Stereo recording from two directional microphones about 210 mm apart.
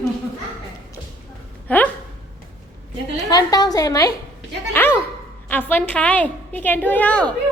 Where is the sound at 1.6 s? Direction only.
5° left (ahead or behind).